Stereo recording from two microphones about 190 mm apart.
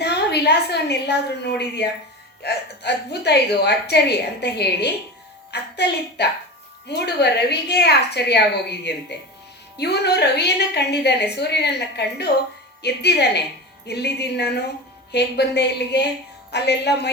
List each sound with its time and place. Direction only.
0.0 s a woman's voice: 60° left (ahead or behind)